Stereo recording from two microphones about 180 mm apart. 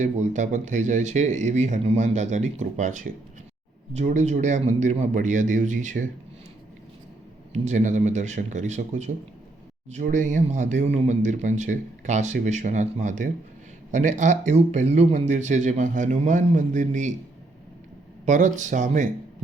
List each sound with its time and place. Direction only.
0.0 s speech: 40° right (ahead or behind)
7.5 s speech: 40° right (ahead or behind)
18.3 s speech: 45° right (ahead or behind)